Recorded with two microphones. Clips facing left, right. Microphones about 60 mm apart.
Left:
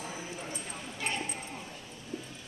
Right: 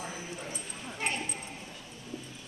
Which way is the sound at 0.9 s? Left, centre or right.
Right.